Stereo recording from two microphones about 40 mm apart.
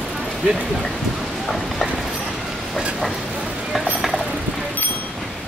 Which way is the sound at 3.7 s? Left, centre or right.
Centre.